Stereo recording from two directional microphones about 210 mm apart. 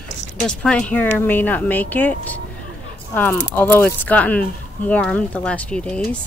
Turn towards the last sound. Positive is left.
turn(degrees=5)  # may be behind; listen again after turning